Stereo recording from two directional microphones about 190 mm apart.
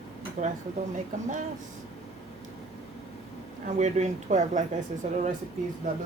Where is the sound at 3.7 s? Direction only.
40° right (ahead or behind).